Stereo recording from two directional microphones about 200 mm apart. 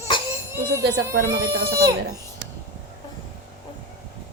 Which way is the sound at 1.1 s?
45° right (ahead or behind).